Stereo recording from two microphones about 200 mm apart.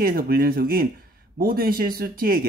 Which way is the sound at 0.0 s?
45° right (ahead or behind).